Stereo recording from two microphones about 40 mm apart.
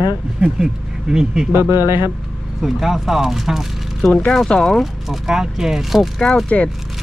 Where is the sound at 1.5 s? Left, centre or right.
Right.